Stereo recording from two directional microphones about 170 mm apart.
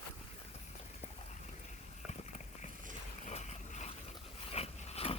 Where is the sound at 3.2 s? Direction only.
40° left (ahead or behind).